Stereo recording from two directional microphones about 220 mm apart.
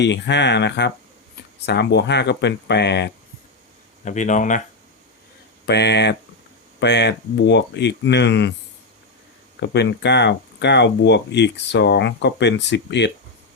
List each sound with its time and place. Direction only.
0.0 s speech: 50° left (ahead or behind)
4.0 s speech: 35° left (ahead or behind)
5.6 s speech: 50° left (ahead or behind)
9.6 s speech: 50° left (ahead or behind)